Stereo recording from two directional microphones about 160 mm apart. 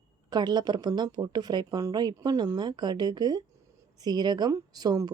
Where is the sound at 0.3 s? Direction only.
25° right (ahead or behind).